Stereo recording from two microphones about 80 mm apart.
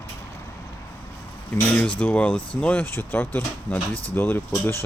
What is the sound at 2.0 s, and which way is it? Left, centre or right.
Speech, centre.